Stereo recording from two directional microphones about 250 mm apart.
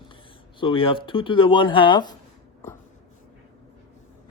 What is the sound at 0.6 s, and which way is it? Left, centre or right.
Speech, left.